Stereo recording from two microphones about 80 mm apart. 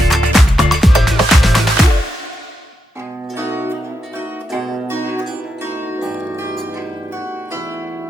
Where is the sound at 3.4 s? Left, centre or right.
Right.